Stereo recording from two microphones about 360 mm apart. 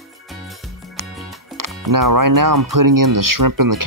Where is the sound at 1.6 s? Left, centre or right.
Right.